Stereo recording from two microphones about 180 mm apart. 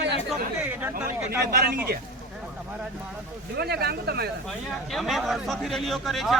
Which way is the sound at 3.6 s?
60° right (ahead or behind).